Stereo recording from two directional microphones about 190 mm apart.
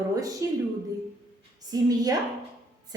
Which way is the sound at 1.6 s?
20° right (ahead or behind).